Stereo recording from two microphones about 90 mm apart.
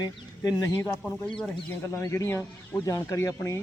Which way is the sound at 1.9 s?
30° left (ahead or behind).